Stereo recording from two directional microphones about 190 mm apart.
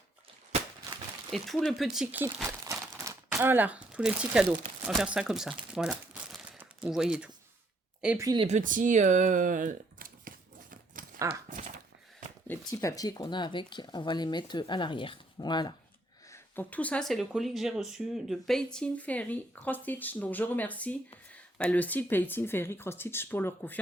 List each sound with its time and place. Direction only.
1.3 s speech: 5° left (ahead or behind)
2.6 s crumpling: 15° right (ahead or behind)
4.9 s speech: 5° right (ahead or behind)
8.4 s a sound: 40° right (ahead or behind)
12.5 s speech: 15° left (ahead or behind)
16.3 s speech: 10° left (ahead or behind)